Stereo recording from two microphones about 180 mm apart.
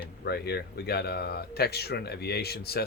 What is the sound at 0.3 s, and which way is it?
Speech, 65° left (ahead or behind).